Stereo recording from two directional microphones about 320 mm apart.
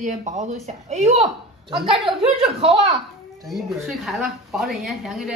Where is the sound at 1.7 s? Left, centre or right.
Centre.